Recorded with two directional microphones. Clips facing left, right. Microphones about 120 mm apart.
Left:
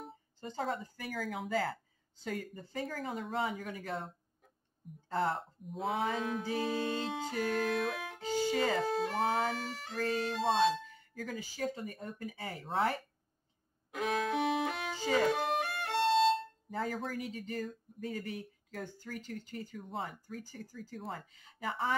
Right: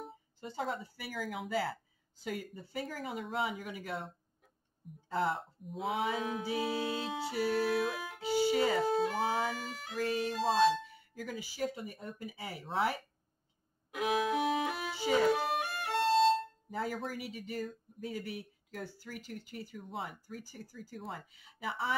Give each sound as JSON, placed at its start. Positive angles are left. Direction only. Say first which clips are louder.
{"t": 0.0, "sound": "speech", "louder": "even", "side_deg": -5}
{"t": 2.5, "sound": "music", "louder": "left 1 dB", "side_deg": -10}
{"t": 5.1, "sound": "music", "louder": "even", "side_deg": -5}
{"t": 10.4, "sound": "speech", "louder": "right 1 dB", "side_deg": 0}
{"t": 10.8, "sound": "speech", "louder": "even", "side_deg": -10}
{"t": 12.3, "sound": "music", "louder": "left 2 dB", "side_deg": -10}
{"t": 13.9, "sound": "violin", "louder": "right 1 dB", "side_deg": -5}
{"t": 17.5, "sound": "music", "louder": "even", "side_deg": -10}
{"t": 18.2, "sound": "speech", "louder": "left 1 dB", "side_deg": -10}
{"t": 19.1, "sound": "music", "louder": "left 3 dB", "side_deg": -10}
{"t": 20.0, "sound": "speech", "louder": "left 1 dB", "side_deg": 40}
{"t": 20.4, "sound": "music", "louder": "left 2 dB", "side_deg": -10}